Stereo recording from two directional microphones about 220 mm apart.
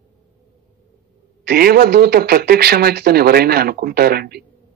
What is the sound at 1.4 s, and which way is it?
A man's voice, 45° right (ahead or behind).